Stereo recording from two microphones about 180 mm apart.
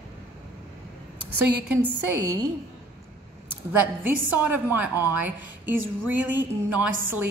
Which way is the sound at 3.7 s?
10° right (ahead or behind).